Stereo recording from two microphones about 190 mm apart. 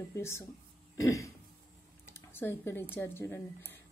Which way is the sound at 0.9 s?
15° left (ahead or behind).